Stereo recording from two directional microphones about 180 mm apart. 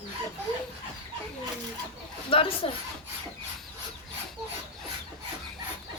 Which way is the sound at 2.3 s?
30° left (ahead or behind).